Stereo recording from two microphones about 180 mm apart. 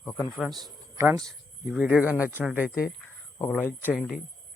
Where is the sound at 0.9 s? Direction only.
15° right (ahead or behind).